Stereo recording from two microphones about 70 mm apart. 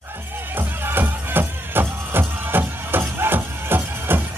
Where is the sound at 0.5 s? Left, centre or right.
Right.